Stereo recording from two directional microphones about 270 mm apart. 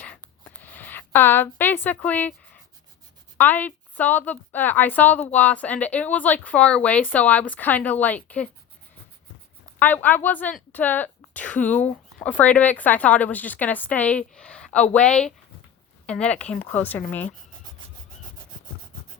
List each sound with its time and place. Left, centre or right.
0.0 s a sound: centre
3.3 s a woman's voice: centre
9.7 s speech: centre